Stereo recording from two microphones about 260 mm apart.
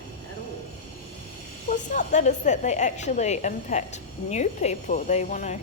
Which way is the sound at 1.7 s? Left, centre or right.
Left.